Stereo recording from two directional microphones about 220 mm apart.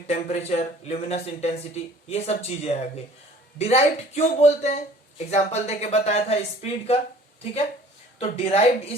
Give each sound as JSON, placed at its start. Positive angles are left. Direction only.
{"t": 0.1, "sound": "speech", "side_deg": 30}
{"t": 8.2, "sound": "speech", "side_deg": 30}